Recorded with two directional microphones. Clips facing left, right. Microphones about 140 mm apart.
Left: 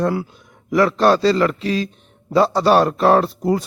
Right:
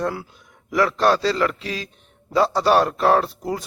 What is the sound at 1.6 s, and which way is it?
Speech, 10° right (ahead or behind).